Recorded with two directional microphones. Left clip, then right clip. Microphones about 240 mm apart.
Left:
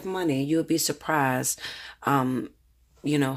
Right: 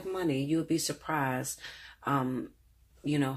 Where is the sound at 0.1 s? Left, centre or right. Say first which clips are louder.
Left 5 dB; left.